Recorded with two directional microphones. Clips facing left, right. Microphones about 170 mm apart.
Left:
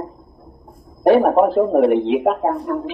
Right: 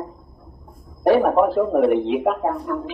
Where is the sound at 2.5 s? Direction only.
30° left (ahead or behind).